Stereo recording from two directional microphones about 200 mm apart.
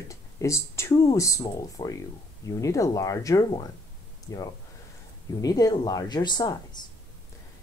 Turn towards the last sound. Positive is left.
turn(degrees=20)  # may be behind; listen again after turning